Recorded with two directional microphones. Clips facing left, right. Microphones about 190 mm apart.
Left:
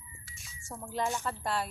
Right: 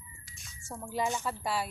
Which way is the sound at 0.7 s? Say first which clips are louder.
Right 1 dB; 5° right (ahead or behind).